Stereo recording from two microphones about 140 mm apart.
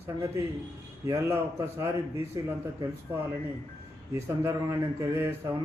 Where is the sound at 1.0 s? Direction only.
20° right (ahead or behind).